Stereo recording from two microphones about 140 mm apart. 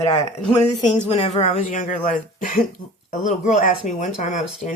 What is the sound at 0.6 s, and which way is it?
Speech, 50° left (ahead or behind).